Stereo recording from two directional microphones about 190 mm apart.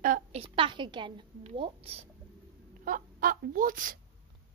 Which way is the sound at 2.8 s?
45° right (ahead or behind).